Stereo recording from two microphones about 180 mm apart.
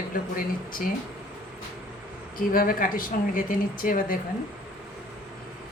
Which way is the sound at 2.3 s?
50° left (ahead or behind).